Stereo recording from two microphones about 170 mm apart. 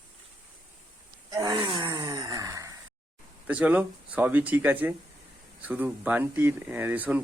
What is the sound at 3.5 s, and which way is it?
Speech, 10° right (ahead or behind).